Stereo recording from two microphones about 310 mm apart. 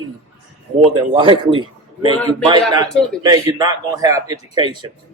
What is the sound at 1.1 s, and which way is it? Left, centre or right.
Speech, centre.